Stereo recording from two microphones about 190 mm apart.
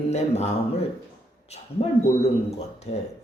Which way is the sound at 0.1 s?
35° left (ahead or behind).